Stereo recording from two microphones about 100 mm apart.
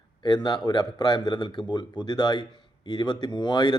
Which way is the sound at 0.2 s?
50° left (ahead or behind).